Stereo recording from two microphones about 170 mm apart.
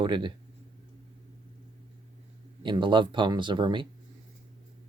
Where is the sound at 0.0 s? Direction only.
25° right (ahead or behind).